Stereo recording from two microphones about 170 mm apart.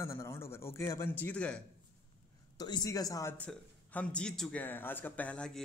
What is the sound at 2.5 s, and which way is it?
A man's voice, 25° left (ahead or behind).